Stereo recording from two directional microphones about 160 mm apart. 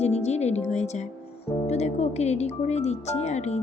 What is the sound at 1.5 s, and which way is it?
Speech, 45° left (ahead or behind).